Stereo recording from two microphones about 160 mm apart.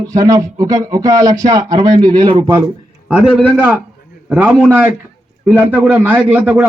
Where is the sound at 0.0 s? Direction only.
20° right (ahead or behind).